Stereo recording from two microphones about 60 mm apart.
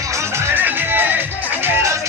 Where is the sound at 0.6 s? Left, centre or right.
Right.